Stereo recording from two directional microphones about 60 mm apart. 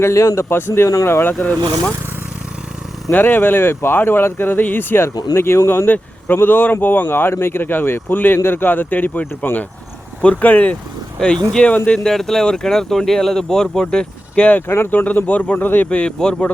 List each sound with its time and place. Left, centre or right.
0.0 s a man's voice: left
1.3 s speech: left
3.1 s speech: left
12.0 s speech: centre
14.7 s a man's voice: left
14.9 s speech: left
15.9 s speech: centre